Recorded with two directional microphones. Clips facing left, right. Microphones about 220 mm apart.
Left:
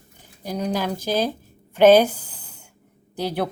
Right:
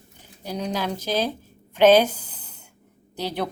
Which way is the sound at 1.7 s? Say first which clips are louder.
Left 2 dB; 10° left (ahead or behind).